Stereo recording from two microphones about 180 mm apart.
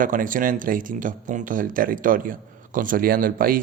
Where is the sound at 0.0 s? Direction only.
50° right (ahead or behind).